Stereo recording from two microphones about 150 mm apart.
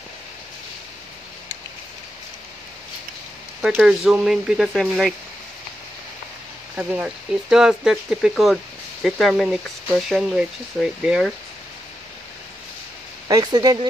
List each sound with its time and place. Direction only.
3.6 s speech: 5° right (ahead or behind)
6.8 s speech: 10° right (ahead or behind)
13.3 s speech: 25° right (ahead or behind)